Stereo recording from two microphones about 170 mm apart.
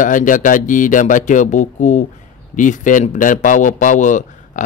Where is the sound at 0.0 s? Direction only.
50° left (ahead or behind).